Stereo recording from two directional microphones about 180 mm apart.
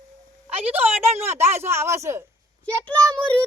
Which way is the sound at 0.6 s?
10° right (ahead or behind).